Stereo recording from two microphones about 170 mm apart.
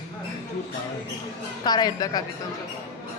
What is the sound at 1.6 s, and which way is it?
Speech, 25° left (ahead or behind).